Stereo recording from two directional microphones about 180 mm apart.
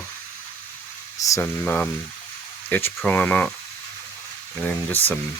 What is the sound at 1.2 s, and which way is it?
Speech, 15° left (ahead or behind).